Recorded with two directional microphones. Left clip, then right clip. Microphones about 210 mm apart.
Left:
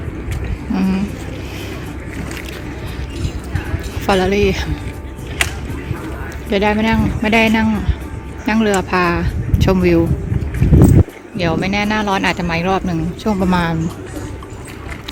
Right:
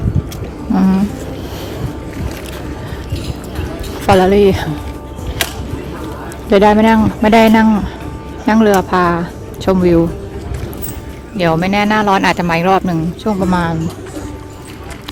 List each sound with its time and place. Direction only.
0.7 s speech: 15° right (ahead or behind)
4.0 s speech: 15° right (ahead or behind)
6.5 s speech: 20° right (ahead or behind)
11.3 s speech: 20° right (ahead or behind)
13.2 s speech: 5° right (ahead or behind)